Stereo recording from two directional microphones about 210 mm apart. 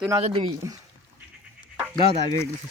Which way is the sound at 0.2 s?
30° right (ahead or behind).